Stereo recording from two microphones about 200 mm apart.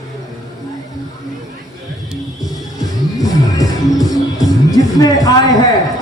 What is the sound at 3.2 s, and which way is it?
Music, 20° left (ahead or behind).